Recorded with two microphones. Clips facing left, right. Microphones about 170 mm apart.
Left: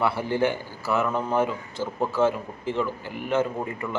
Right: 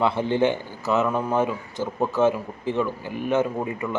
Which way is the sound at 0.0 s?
20° right (ahead or behind).